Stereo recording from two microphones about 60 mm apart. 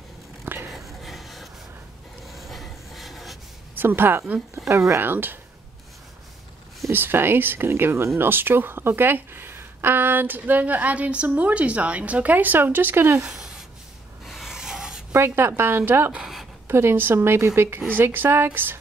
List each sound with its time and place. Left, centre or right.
0.7 s a sound: centre
3.7 s speech: right
4.6 s speech: right
5.1 s speech: right
6.9 s speech: right
13.2 s a sound: centre
14.2 s rub: centre
15.1 s speech: right
16.2 s a sound: centre
16.6 s speech: right